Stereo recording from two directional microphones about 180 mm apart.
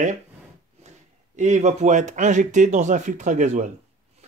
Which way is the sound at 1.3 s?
40° right (ahead or behind).